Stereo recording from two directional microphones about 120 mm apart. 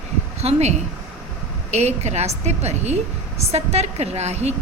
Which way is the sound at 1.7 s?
65° right (ahead or behind).